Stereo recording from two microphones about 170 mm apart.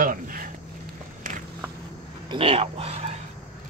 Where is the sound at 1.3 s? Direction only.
50° right (ahead or behind).